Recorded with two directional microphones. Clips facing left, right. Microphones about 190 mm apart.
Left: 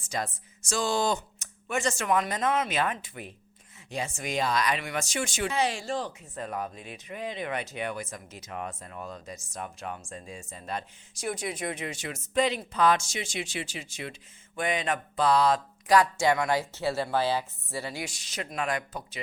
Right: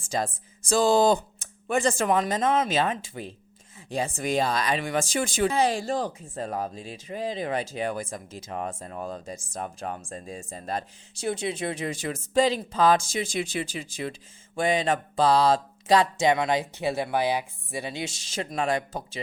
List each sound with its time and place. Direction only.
0.7 s speech: 35° right (ahead or behind)
11.2 s speech: 30° right (ahead or behind)